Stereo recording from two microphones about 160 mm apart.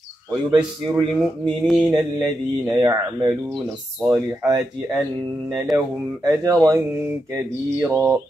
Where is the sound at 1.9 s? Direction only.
25° right (ahead or behind).